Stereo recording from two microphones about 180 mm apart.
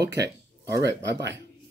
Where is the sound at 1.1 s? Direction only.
75° right (ahead or behind).